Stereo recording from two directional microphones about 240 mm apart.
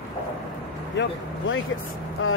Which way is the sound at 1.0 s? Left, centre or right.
Left.